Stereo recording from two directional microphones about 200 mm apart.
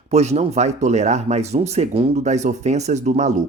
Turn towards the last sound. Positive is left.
turn(degrees=-35)  # may be behind; listen again after turning